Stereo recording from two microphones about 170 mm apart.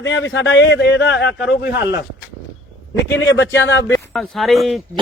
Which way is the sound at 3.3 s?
90° left.